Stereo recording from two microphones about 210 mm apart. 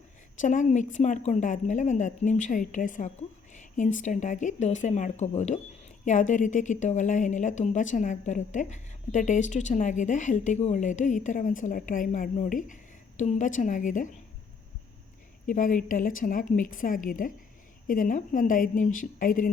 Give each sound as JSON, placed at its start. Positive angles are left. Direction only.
{"t": 0.3, "sound": "a woman's voice", "side_deg": 35}
{"t": 15.4, "sound": "a woman's voice", "side_deg": 40}